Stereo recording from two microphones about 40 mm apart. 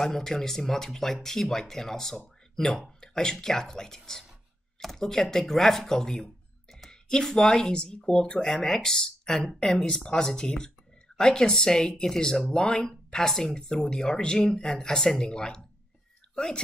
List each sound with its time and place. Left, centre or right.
0.0 s speech: centre
13.3 s speech: centre
13.6 s speech: centre